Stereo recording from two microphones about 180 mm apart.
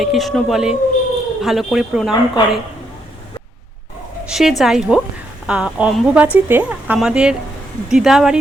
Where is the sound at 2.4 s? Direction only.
25° left (ahead or behind).